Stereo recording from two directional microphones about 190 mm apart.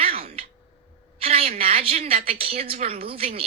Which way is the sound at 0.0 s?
30° right (ahead or behind).